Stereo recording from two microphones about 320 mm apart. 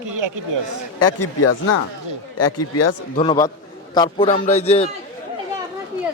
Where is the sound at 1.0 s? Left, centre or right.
Left.